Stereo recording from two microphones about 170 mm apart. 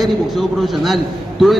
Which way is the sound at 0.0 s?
Centre (ahead or behind).